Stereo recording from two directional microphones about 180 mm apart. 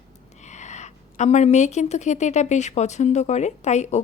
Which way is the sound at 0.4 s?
40° left (ahead or behind).